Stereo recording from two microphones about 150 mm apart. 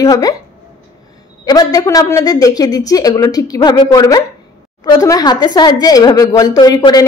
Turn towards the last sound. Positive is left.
turn(degrees=25)  # may be behind; listen again after turning